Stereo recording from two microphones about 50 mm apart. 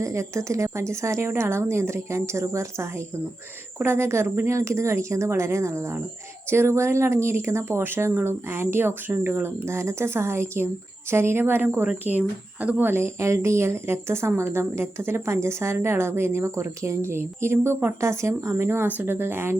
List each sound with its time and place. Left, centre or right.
0.0 s a woman's voice: right
1.3 s speech: right
3.8 s a woman's voice: right
12.8 s a woman's voice: right
13.1 s speech: right
18.0 s speech: right
18.5 s a woman's voice: right